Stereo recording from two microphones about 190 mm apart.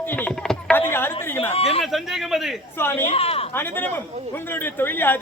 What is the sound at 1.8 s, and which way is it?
Speech, centre (ahead or behind).